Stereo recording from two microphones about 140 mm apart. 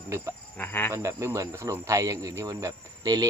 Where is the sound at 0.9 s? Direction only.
20° right (ahead or behind).